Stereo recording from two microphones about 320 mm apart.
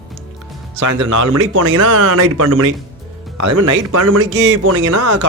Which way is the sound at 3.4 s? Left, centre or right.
Right.